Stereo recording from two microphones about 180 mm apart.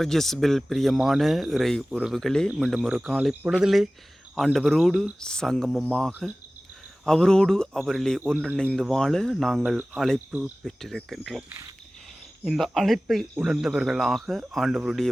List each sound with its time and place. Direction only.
0.0 s speech: centre (ahead or behind)